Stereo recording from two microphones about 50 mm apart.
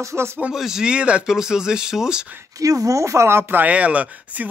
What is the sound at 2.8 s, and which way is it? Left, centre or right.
Speech, right.